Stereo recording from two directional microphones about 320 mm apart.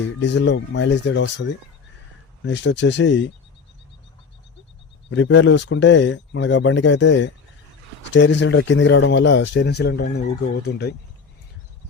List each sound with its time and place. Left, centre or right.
0.2 s speech: left
5.1 s speech: left